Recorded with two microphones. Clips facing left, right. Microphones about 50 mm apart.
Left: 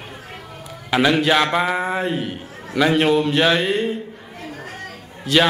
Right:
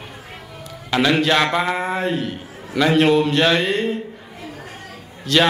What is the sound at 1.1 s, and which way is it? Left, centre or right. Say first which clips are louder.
Mantra: right 1 dB; centre.